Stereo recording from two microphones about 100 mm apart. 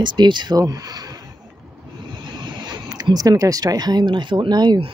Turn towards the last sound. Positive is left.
turn(degrees=-45)  # may be behind; listen again after turning